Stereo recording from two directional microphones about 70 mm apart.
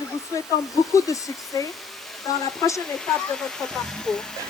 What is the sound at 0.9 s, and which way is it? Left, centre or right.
Speech, left.